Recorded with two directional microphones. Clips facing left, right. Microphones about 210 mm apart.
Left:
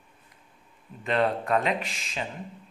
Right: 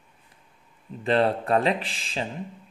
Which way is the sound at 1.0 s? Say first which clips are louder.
Right 3 dB; 30° right (ahead or behind).